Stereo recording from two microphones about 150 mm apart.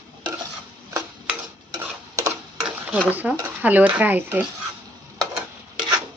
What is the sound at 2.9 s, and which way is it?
Speech, 10° right (ahead or behind).